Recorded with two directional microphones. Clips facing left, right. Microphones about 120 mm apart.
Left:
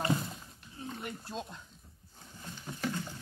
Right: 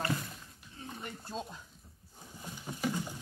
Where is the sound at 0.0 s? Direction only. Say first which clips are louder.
Left 3 dB; 25° left (ahead or behind).